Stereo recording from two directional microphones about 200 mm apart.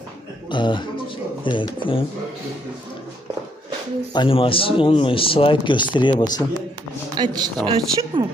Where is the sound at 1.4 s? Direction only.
25° left (ahead or behind).